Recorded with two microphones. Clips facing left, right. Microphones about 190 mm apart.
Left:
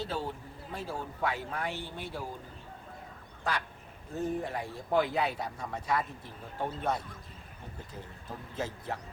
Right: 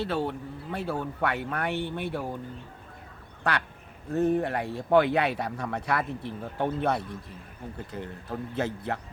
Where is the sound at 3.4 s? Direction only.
65° right (ahead or behind).